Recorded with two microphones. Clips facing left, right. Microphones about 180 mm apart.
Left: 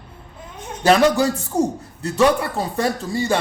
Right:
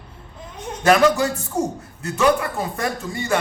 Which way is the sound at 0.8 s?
30° left (ahead or behind).